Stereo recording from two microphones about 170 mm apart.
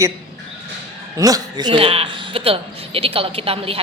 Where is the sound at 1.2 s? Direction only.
25° right (ahead or behind).